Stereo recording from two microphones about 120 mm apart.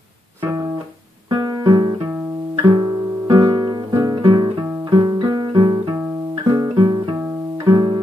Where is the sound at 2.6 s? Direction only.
35° right (ahead or behind).